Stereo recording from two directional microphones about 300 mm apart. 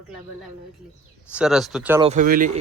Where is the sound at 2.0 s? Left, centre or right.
Right.